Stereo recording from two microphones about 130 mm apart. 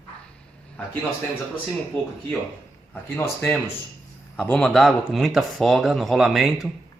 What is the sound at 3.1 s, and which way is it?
Speech, 15° left (ahead or behind).